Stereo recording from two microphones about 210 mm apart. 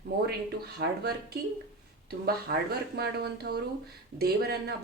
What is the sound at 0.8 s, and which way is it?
Speech, 55° right (ahead or behind).